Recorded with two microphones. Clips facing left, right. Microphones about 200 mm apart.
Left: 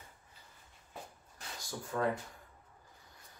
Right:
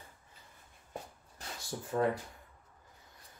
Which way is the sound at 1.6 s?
25° right (ahead or behind).